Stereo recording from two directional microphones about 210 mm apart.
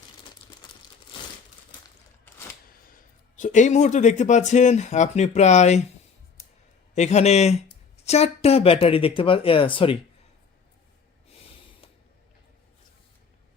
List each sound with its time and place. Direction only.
2.9 s speech: 35° left (ahead or behind)
6.9 s speech: 30° left (ahead or behind)